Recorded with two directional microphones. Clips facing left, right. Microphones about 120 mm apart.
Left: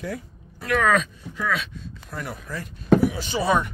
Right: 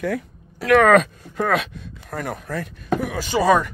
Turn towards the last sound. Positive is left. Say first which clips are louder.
# right 2 dB
turn(degrees=-40)  # may be behind; listen again after turning